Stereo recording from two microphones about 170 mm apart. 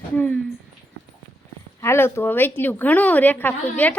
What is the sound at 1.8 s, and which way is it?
A woman's voice, 15° left (ahead or behind).